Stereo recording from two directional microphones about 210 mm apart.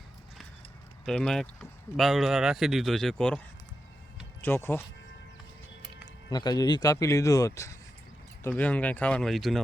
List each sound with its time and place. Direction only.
1.0 s a man's voice: 5° left (ahead or behind)
6.3 s speech: 20° left (ahead or behind); by 9.6 s centre (ahead or behind)